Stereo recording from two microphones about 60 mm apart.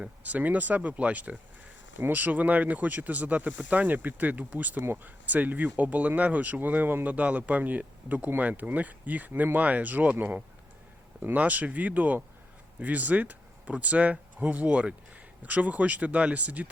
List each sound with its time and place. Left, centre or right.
0.2 s speech: right